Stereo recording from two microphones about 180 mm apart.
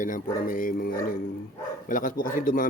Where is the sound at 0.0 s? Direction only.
50° left (ahead or behind).